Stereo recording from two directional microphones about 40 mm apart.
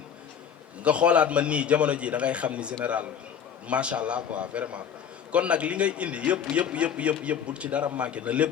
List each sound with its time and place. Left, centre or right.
0.9 s speech: right